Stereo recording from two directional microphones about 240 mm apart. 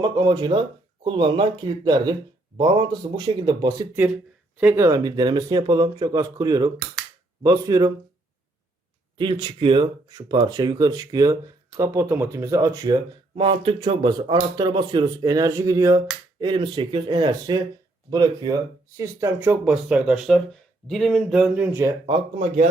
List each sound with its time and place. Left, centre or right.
0.0 s speech: centre
4.0 s speech: centre
9.1 s speech: centre
22.0 s speech: right